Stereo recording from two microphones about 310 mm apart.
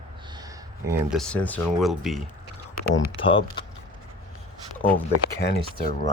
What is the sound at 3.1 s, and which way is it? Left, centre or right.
Speech, centre.